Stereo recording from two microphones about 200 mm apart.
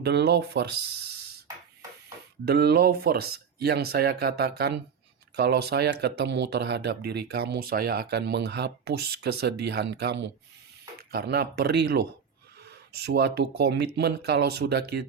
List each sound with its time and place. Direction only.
0.0 s speech: 55° right (ahead or behind)
2.4 s speech: 55° right (ahead or behind)